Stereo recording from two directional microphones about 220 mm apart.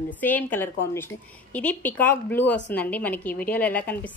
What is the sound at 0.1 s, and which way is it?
A woman's voice, 10° left (ahead or behind).